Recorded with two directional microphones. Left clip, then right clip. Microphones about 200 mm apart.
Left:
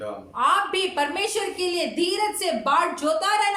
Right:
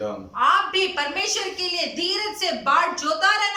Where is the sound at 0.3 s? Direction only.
25° left (ahead or behind).